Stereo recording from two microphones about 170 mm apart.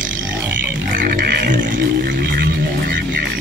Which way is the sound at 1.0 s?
60° right (ahead or behind).